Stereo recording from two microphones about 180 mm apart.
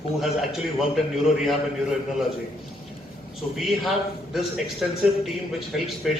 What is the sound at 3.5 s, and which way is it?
A man's voice, centre (ahead or behind).